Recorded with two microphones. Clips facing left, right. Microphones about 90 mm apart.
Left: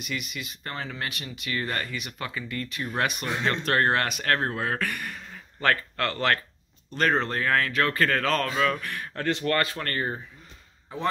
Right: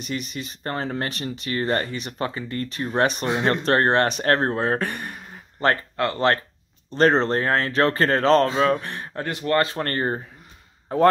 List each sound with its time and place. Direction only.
0.0 s a man's voice: 35° right (ahead or behind); by 11.1 s 50° right (ahead or behind)